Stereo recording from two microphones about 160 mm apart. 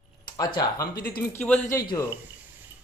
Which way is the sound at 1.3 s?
10° left (ahead or behind).